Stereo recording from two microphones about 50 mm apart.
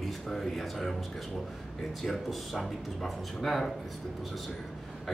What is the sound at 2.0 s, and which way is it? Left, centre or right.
A man's voice, centre.